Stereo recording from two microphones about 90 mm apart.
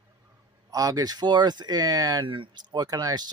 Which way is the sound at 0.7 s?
40° right (ahead or behind).